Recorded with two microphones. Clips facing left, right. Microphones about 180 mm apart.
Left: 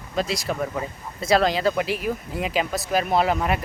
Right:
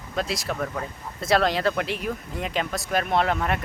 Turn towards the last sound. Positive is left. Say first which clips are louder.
# left 2 dB
turn(degrees=5)  # may be behind; listen again after turning